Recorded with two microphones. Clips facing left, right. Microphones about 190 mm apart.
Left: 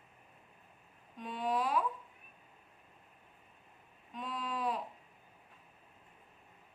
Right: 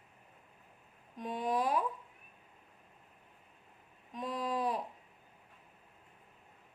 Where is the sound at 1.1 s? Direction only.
40° right (ahead or behind).